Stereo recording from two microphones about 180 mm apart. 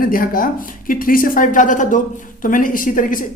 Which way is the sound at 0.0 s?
50° left (ahead or behind).